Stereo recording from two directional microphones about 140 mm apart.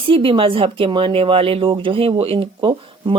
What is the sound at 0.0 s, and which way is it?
Speech, 40° right (ahead or behind).